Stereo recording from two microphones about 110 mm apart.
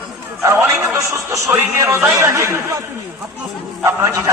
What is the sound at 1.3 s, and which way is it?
A man's voice, 25° right (ahead or behind).